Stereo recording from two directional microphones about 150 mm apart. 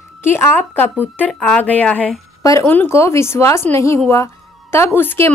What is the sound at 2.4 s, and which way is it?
Speech, 20° left (ahead or behind).